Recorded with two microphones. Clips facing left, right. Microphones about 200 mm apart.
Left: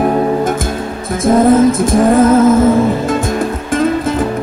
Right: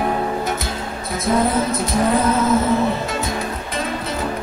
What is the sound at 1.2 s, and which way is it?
Music, 50° left (ahead or behind).